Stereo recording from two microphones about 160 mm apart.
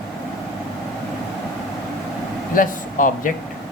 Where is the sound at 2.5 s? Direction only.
55° left (ahead or behind).